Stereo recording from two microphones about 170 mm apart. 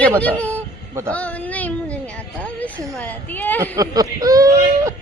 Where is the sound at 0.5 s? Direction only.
15° right (ahead or behind).